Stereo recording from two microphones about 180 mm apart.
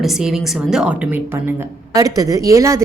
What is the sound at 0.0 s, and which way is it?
A woman's voice, centre (ahead or behind).